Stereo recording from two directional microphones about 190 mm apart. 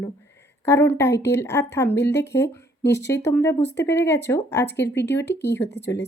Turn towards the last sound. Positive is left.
turn(degrees=15)  # may be behind; listen again after turning